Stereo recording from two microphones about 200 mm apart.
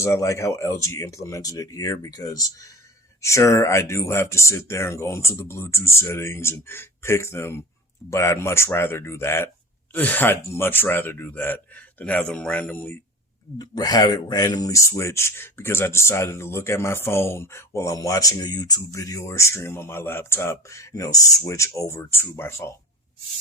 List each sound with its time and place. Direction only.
0.0 s speech: 15° left (ahead or behind)